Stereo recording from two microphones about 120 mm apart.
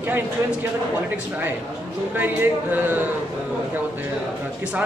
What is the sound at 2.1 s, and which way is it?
Speech, 15° right (ahead or behind).